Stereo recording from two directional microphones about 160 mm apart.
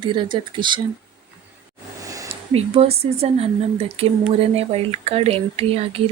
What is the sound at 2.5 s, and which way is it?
Speech, 40° right (ahead or behind).